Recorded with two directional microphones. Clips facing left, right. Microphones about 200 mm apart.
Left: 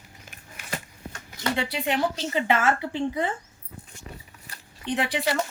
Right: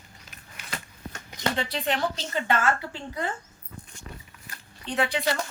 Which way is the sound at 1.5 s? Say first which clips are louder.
Left 4 dB; 10° left (ahead or behind).